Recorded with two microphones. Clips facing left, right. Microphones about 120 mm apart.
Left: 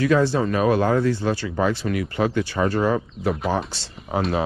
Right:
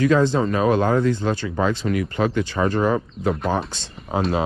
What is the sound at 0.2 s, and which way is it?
Speech, 20° right (ahead or behind).